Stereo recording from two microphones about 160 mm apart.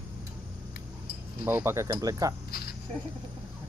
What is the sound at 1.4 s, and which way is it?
Speech, 15° right (ahead or behind).